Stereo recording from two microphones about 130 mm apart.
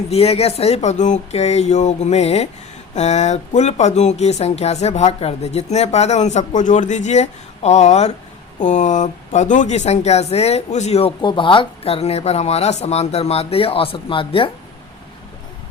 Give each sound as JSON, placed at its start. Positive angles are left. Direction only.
{"t": 0.1, "sound": "speech", "side_deg": 50}